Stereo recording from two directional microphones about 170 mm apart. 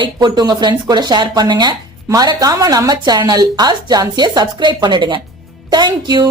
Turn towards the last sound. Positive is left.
turn(degrees=-25)  # may be behind; listen again after turning